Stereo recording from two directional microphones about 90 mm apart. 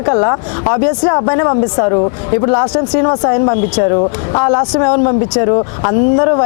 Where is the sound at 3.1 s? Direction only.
30° left (ahead or behind).